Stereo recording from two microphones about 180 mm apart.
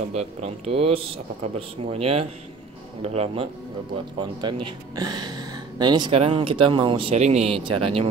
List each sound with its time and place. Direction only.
0.1 s speech: 35° right (ahead or behind)
4.2 s speech: 25° right (ahead or behind)